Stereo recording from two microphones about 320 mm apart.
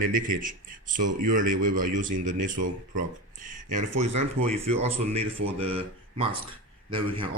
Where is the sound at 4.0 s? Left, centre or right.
Centre.